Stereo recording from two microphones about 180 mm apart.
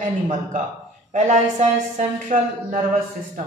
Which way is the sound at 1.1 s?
40° right (ahead or behind).